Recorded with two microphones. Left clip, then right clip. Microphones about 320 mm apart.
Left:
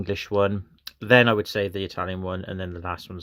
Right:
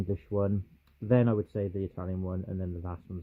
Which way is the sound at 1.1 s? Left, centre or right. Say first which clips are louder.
Left 10 dB; centre.